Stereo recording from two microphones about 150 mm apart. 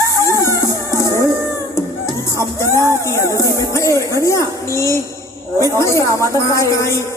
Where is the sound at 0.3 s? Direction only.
20° left (ahead or behind).